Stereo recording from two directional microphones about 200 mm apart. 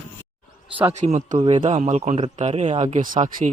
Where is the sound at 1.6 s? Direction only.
35° right (ahead or behind).